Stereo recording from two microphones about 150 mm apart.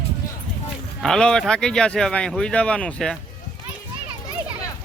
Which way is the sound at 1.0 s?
5° left (ahead or behind).